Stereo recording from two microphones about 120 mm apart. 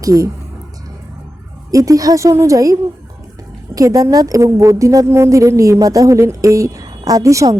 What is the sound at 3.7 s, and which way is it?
A woman's voice, 30° right (ahead or behind).